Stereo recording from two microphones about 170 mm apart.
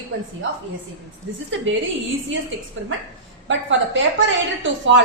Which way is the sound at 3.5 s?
90° right.